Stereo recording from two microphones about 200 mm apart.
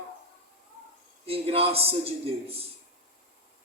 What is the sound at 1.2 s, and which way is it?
Speech, 30° right (ahead or behind).